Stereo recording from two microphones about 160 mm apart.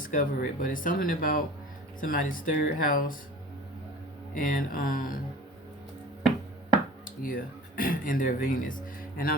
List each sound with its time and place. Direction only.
0.0 s speech: 55° left (ahead or behind)
4.4 s speech: 60° left (ahead or behind)
7.0 s speech: 60° left (ahead or behind)